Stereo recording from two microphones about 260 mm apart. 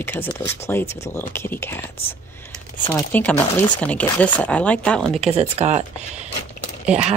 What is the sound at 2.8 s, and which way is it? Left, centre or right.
Speech, centre.